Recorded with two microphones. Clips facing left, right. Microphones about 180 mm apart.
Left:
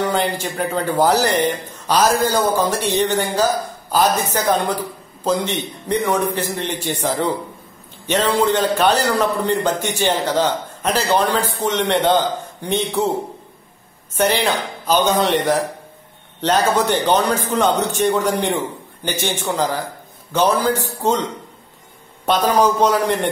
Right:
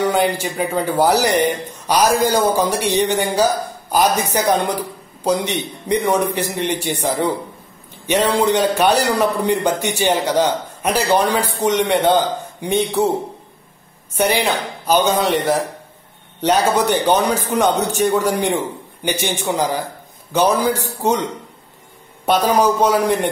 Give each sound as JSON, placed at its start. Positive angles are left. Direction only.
{"t": 0.0, "sound": "a man's voice", "side_deg": -10}
{"t": 14.1, "sound": "a man's voice", "side_deg": -15}